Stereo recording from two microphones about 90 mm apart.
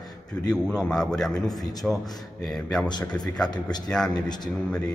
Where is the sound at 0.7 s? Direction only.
10° left (ahead or behind).